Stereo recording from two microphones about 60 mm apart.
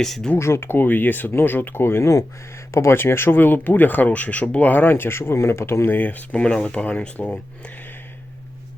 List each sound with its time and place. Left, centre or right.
0.0 s speech: centre
0.3 s speech: left
2.9 s speech: left
6.4 s speech: centre